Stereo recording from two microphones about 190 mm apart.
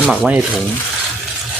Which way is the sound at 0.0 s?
5° right (ahead or behind).